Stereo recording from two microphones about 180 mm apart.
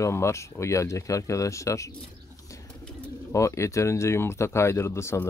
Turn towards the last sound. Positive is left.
turn(degrees=15)  # may be behind; listen again after turning